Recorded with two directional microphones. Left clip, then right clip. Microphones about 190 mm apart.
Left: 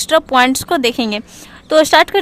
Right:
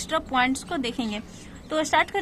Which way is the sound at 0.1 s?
40° left (ahead or behind).